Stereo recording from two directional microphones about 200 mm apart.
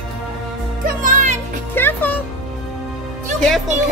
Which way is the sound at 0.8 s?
40° right (ahead or behind).